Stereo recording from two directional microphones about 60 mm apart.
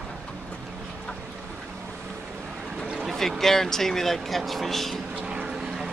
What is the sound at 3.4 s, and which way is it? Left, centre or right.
Speech, centre.